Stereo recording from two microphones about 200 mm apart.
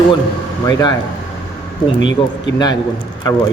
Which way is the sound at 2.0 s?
70° left (ahead or behind).